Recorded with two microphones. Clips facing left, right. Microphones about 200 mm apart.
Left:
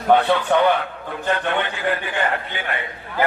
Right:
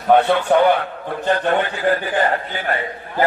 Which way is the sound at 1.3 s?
40° right (ahead or behind).